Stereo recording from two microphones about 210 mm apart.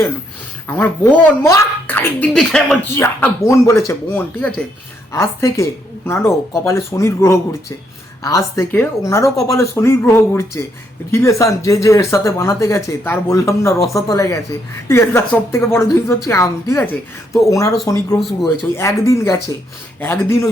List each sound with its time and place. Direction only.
0.7 s speech: 10° left (ahead or behind)
18.2 s speech: centre (ahead or behind)
18.5 s speech: 10° left (ahead or behind)